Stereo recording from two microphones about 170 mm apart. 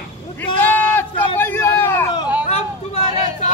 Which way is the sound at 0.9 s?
10° left (ahead or behind).